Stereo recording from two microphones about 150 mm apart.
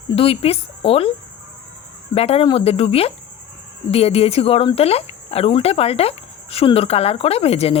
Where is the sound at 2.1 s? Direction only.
40° left (ahead or behind).